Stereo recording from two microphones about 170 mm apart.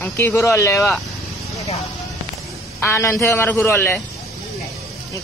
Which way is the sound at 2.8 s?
15° left (ahead or behind).